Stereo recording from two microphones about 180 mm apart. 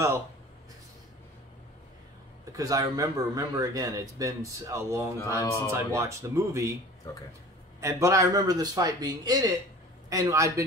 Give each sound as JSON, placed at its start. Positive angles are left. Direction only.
{"t": 2.5, "sound": "a man's voice", "side_deg": -20}
{"t": 7.8, "sound": "a man's voice", "side_deg": -15}